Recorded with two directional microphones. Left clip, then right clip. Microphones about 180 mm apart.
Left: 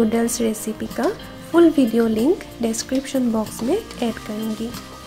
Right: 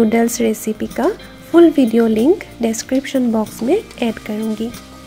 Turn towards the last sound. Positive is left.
turn(degrees=-20)  # may be behind; listen again after turning